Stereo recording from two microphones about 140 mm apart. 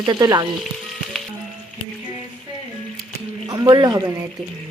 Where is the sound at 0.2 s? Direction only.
30° right (ahead or behind).